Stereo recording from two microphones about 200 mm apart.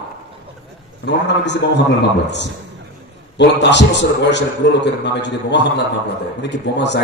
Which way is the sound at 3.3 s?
60° left (ahead or behind).